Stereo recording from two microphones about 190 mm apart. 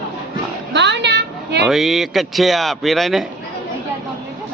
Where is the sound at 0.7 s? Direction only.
65° right (ahead or behind).